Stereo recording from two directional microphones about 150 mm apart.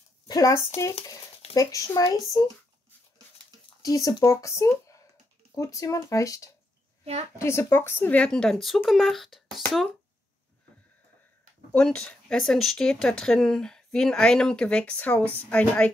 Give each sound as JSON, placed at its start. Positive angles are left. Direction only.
{"t": 0.3, "sound": "speech", "side_deg": 20}
{"t": 3.8, "sound": "speech", "side_deg": 25}
{"t": 11.7, "sound": "speech", "side_deg": 5}